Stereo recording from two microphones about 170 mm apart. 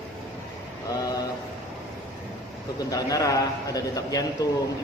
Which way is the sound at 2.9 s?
20° left (ahead or behind).